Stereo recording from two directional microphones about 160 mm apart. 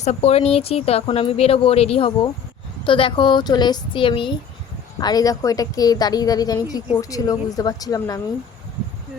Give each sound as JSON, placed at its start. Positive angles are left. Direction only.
{"t": 0.0, "sound": "a woman's voice", "side_deg": 45}